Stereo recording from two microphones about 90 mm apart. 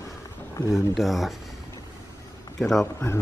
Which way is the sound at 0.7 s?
Centre (ahead or behind).